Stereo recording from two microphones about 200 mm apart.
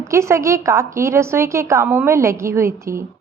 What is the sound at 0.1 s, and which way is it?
A woman's voice, 15° right (ahead or behind).